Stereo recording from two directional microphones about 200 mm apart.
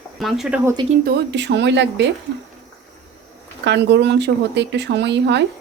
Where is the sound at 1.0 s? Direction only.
60° right (ahead or behind).